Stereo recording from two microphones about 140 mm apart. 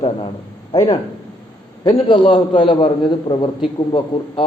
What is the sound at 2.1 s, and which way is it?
A man's voice, 35° left (ahead or behind).